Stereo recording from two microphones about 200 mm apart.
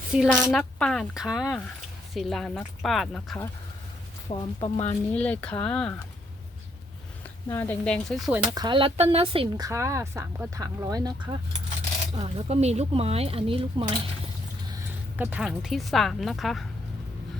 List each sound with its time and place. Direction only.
0.1 s speech: centre (ahead or behind)
4.3 s speech: 25° left (ahead or behind)
5.1 s speech: 5° left (ahead or behind)
7.5 s speech: 10° left (ahead or behind)
8.5 s speech: 25° right (ahead or behind)
12.2 s speech: 35° right (ahead or behind)
14.7 s a woman's voice: 10° right (ahead or behind)